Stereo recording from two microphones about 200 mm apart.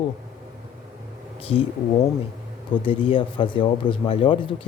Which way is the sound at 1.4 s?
30° left (ahead or behind).